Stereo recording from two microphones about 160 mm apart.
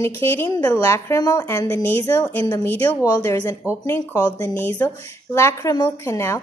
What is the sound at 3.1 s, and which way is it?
Speech, 20° left (ahead or behind).